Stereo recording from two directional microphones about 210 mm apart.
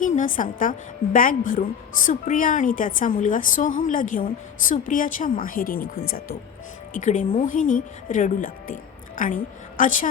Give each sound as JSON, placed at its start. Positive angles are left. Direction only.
{"t": 0.0, "sound": "a woman's voice", "side_deg": 40}
{"t": 6.9, "sound": "a woman's voice", "side_deg": 35}